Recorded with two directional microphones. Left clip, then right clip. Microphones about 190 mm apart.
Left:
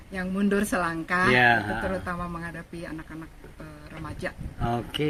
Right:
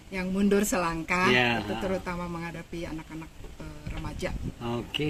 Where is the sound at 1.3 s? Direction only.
55° left (ahead or behind).